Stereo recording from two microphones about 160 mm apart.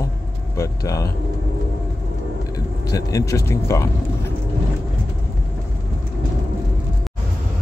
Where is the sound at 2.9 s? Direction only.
20° left (ahead or behind).